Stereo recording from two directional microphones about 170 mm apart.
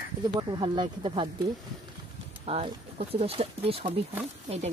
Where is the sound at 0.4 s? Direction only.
25° right (ahead or behind).